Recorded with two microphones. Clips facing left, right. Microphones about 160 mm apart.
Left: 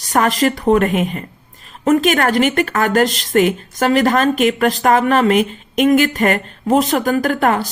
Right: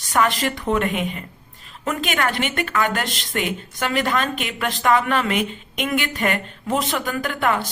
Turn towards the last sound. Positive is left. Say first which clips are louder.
# left 6 dB
turn(degrees=45)  # may be behind; listen again after turning